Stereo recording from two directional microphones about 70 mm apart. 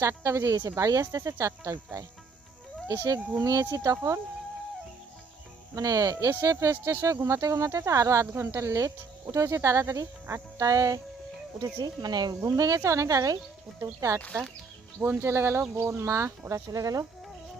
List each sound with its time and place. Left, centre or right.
0.0 s speech: right
3.4 s speech: right
5.7 s speech: right
6.4 s speech: right
8.3 s speech: right
11.6 s speech: right
12.4 s speech: right
15.0 s speech: right